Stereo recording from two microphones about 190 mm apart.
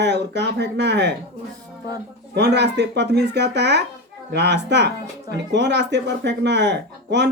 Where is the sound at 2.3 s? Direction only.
60° right (ahead or behind).